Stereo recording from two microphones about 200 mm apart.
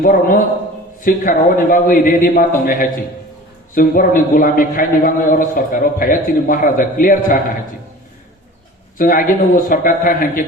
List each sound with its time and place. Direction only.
0.0 s a man's voice: 45° left (ahead or behind)
9.0 s a man's voice: 45° left (ahead or behind)